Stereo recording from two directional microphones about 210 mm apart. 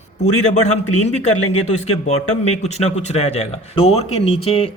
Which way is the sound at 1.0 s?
35° left (ahead or behind).